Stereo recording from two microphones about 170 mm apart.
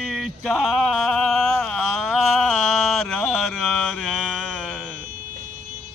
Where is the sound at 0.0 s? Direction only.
5° right (ahead or behind).